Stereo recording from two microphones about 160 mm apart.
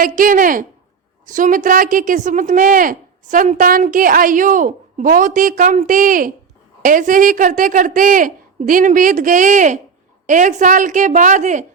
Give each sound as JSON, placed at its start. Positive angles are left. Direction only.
{"t": 0.0, "sound": "a woman's voice", "side_deg": -60}